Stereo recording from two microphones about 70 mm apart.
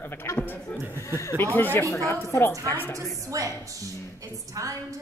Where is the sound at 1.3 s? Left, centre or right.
Left.